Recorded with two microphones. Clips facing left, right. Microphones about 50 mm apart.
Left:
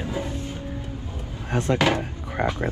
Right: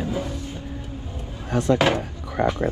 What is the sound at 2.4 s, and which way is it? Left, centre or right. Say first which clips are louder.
Speech: right 3 dB; left.